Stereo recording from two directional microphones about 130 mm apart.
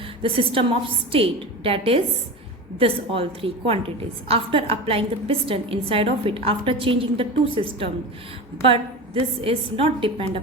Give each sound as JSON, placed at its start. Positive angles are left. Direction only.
{"t": 0.2, "sound": "a woman's voice", "side_deg": -45}